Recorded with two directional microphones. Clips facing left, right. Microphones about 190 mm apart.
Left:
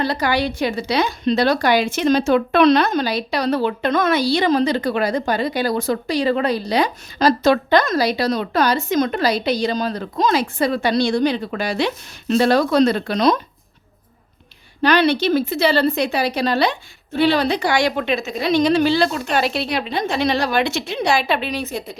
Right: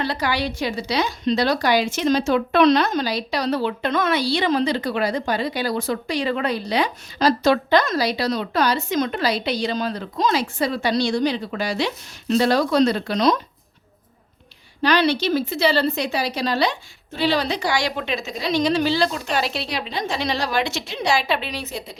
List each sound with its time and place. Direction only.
0.0 s a woman's voice: 45° left (ahead or behind)
14.8 s a woman's voice: 55° left (ahead or behind)